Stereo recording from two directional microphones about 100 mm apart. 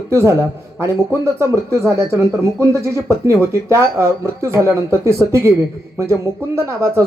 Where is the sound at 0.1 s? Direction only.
30° right (ahead or behind).